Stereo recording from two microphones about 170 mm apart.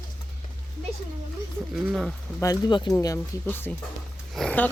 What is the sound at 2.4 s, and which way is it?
Speech, 25° left (ahead or behind).